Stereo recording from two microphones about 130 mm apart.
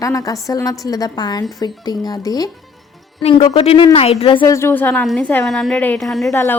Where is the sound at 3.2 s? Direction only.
55° left (ahead or behind).